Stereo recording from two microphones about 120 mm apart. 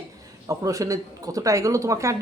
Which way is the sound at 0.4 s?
30° right (ahead or behind).